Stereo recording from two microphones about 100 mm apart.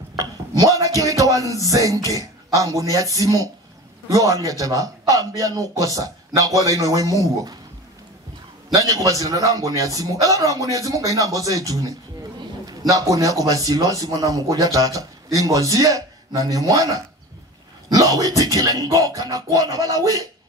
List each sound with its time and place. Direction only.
0.1 s a sound: 35° right (ahead or behind)
2.0 s a man's voice: 35° right (ahead or behind)
8.7 s a man's voice: 35° right (ahead or behind)